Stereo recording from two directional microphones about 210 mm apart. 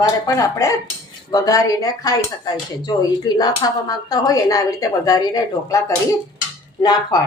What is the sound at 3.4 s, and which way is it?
Speech, 20° left (ahead or behind).